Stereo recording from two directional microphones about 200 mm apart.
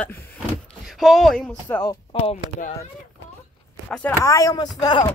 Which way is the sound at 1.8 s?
20° left (ahead or behind).